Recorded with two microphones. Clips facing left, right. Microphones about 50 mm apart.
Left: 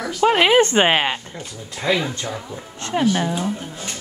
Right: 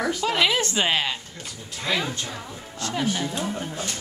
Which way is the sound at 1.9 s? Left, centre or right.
Centre.